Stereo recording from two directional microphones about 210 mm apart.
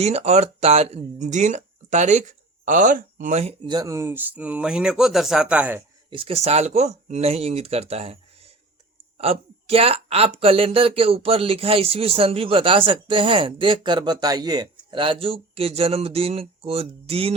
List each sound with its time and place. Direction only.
0.0 s speech: 30° right (ahead or behind)
3.7 s speech: 15° right (ahead or behind)
6.1 s speech: 25° right (ahead or behind)